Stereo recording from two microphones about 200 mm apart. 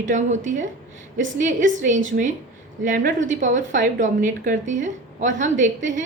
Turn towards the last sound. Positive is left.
turn(degrees=-40)  # may be behind; listen again after turning